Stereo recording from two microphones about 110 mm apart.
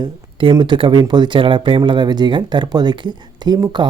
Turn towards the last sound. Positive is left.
turn(degrees=-40)  # may be behind; listen again after turning